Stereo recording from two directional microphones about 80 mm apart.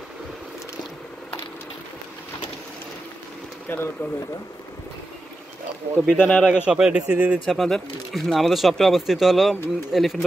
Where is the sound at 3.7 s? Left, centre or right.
Left.